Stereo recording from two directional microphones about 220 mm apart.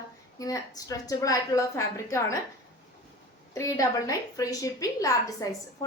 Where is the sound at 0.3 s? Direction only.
15° left (ahead or behind).